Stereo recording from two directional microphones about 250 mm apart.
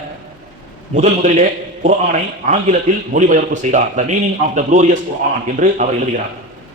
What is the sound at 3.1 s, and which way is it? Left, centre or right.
Speech, right.